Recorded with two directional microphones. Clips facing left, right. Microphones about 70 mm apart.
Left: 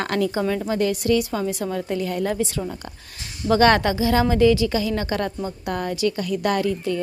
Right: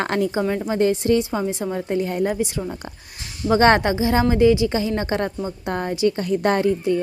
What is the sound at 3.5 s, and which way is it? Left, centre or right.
A woman's voice, right.